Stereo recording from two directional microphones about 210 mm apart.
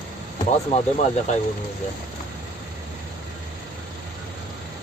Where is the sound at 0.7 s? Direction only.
30° left (ahead or behind).